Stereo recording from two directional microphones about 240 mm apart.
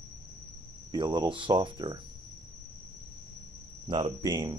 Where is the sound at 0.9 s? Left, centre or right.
Centre.